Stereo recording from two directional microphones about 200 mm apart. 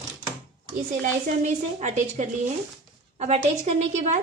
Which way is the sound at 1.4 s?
35° right (ahead or behind).